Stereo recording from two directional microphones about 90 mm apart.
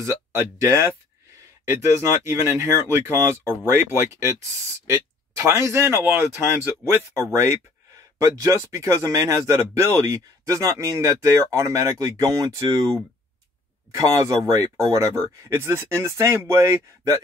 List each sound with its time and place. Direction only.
0.0 s speech: 30° right (ahead or behind)
13.9 s speech: 40° right (ahead or behind)